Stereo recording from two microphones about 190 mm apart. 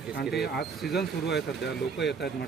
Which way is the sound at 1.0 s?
60° left (ahead or behind).